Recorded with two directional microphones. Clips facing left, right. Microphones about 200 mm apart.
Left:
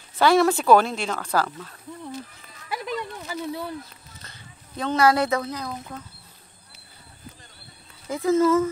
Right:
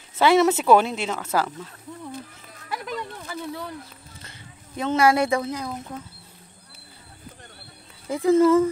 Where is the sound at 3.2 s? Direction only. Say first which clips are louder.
Left 2 dB; 10° left (ahead or behind).